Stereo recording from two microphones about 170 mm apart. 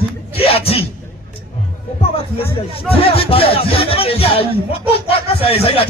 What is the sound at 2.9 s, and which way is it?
Speech, 35° left (ahead or behind).